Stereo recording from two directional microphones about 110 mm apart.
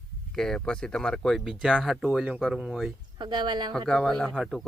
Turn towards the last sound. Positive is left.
turn(degrees=0)  # may be behind; listen again after turning